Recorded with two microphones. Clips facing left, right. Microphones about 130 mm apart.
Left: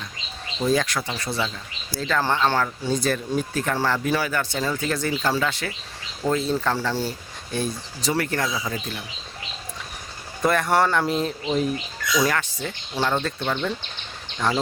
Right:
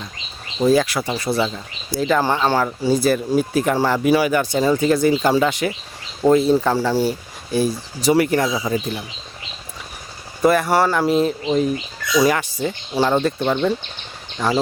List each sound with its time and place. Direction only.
0.7 s speech: 5° right (ahead or behind)
10.4 s speech: 5° right (ahead or behind)